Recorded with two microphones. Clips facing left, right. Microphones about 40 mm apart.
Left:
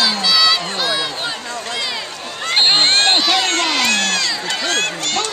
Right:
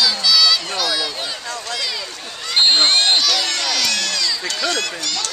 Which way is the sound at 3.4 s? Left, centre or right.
Left.